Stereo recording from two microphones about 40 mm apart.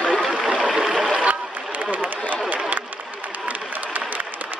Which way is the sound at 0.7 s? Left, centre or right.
Centre.